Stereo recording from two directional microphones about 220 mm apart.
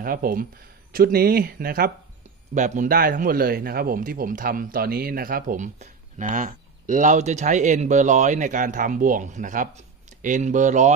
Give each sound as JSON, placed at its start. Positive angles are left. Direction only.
{"t": 0.0, "sound": "a man's voice", "side_deg": -40}